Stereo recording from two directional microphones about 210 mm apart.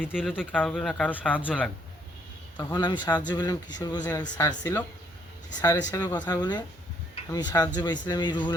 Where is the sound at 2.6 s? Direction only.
20° left (ahead or behind).